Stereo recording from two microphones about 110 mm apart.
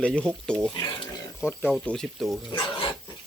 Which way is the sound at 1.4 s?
20° left (ahead or behind).